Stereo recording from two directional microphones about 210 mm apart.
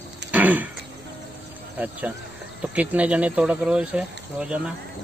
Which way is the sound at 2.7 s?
5° right (ahead or behind).